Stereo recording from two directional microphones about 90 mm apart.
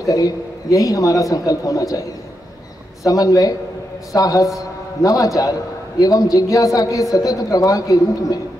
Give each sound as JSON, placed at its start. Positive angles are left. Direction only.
{"t": 0.0, "sound": "a woman's voice", "side_deg": 40}
{"t": 3.1, "sound": "a woman's voice", "side_deg": 40}